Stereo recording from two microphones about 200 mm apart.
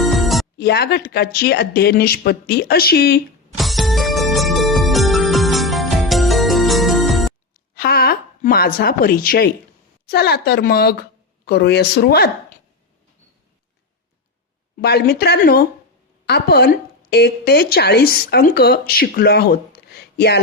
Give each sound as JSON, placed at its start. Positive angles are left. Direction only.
{"t": 0.0, "sound": "music", "side_deg": 0}
{"t": 0.6, "sound": "a woman's voice", "side_deg": 55}
{"t": 3.6, "sound": "music", "side_deg": 0}
{"t": 7.8, "sound": "a woman's voice", "side_deg": 50}
{"t": 14.8, "sound": "a woman's voice", "side_deg": 55}
{"t": 20.0, "sound": "a sound", "side_deg": 55}